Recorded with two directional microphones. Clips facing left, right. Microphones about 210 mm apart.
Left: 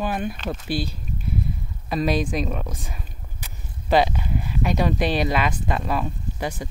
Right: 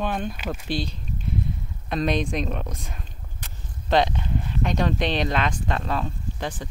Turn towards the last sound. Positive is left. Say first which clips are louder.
# left 2 dB
turn(degrees=10)  # may be behind; listen again after turning